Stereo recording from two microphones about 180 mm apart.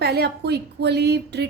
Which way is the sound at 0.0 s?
65° right (ahead or behind).